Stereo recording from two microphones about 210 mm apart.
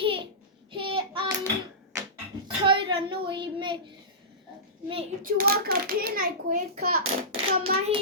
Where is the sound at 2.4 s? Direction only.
25° right (ahead or behind).